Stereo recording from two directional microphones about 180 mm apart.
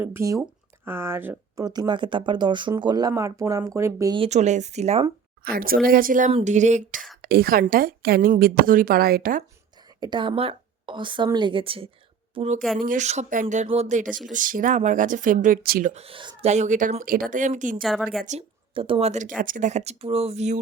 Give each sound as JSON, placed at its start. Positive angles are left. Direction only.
{"t": 0.0, "sound": "speech", "side_deg": -15}
{"t": 4.2, "sound": "speech", "side_deg": -40}
{"t": 5.4, "sound": "speech", "side_deg": -55}
{"t": 7.2, "sound": "speech", "side_deg": -60}
{"t": 10.0, "sound": "a woman's voice", "side_deg": -25}
{"t": 12.8, "sound": "speech", "side_deg": -45}
{"t": 15.9, "sound": "speech", "side_deg": -35}
{"t": 17.8, "sound": "a woman's voice", "side_deg": 0}
{"t": 18.3, "sound": "speech", "side_deg": -30}